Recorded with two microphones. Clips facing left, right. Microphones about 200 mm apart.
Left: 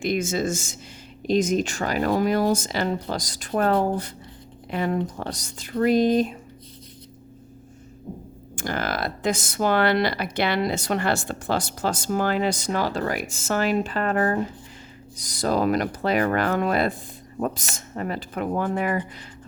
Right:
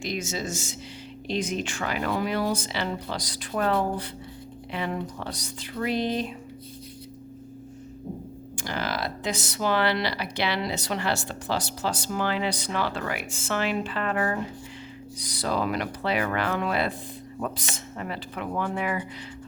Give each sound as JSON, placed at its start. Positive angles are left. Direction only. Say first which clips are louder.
{"t": 0.0, "sound": "speech", "louder": "left 7 dB", "side_deg": 55}
{"t": 8.5, "sound": "speech", "louder": "left 3 dB", "side_deg": 50}